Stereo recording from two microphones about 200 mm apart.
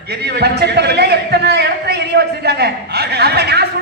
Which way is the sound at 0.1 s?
55° right (ahead or behind).